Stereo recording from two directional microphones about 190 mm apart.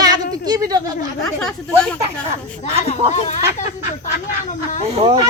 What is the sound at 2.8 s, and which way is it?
Speech, 35° left (ahead or behind).